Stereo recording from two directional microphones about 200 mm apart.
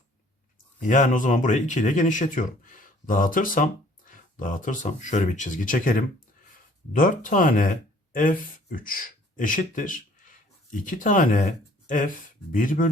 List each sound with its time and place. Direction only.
0.8 s speech: 40° left (ahead or behind)